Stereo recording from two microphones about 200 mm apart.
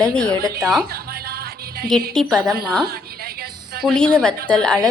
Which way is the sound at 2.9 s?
50° right (ahead or behind).